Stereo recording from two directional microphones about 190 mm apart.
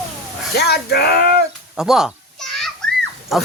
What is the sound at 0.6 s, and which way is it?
Speech, 55° left (ahead or behind).